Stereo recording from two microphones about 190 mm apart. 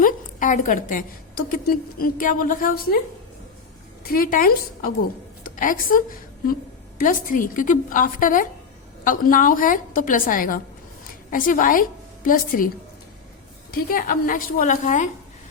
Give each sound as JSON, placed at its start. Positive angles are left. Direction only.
{"t": 0.0, "sound": "a woman's voice", "side_deg": 40}
{"t": 4.0, "sound": "a woman's voice", "side_deg": 50}
{"t": 13.7, "sound": "a woman's voice", "side_deg": 50}